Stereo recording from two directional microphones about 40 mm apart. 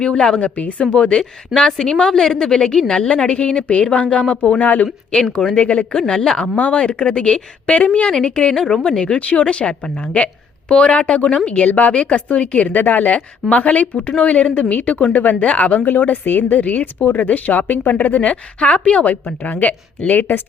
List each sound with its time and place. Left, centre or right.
0.0 s a woman's voice: left
4.6 s a woman's voice: left
5.5 s speech: left
6.0 s speech: centre
6.6 s a woman's voice: left
9.1 s a woman's voice: left
15.8 s speech: left